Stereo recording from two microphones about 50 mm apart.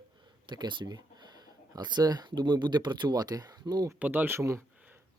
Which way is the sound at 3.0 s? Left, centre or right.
Right.